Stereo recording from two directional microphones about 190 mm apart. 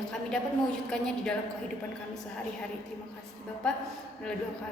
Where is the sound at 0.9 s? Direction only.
5° left (ahead or behind).